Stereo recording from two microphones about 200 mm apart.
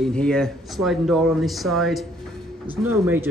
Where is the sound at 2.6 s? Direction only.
10° right (ahead or behind).